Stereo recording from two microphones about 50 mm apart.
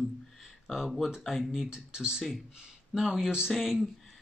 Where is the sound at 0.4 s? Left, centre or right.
Centre.